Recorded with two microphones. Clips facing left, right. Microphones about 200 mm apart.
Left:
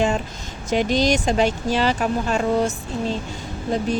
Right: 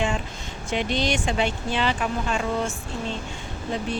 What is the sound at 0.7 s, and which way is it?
Speech, 40° left (ahead or behind).